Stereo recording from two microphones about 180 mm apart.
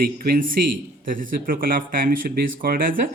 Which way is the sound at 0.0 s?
55° right (ahead or behind).